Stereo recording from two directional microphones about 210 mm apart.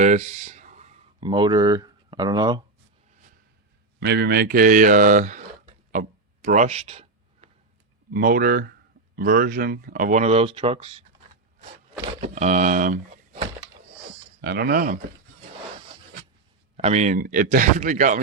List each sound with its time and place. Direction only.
0.0 s a sound: 35° right (ahead or behind)
1.3 s speech: 20° right (ahead or behind)
4.0 s a sound: 50° right (ahead or behind); by 7.5 s 30° right (ahead or behind)
8.1 s speech: 45° right (ahead or behind); by 11.0 s 25° right (ahead or behind)
12.2 s speech: 35° right (ahead or behind)
14.4 s speech: 50° right (ahead or behind)
16.7 s speech: 30° right (ahead or behind)